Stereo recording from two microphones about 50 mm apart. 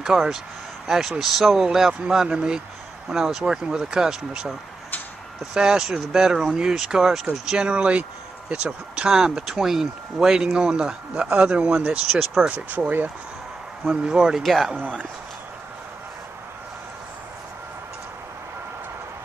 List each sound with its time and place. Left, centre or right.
0.0 s speech: centre
7.7 s a man's voice: right
9.1 s a man's voice: centre; by 13.1 s right
14.0 s speech: centre
14.4 s speech: centre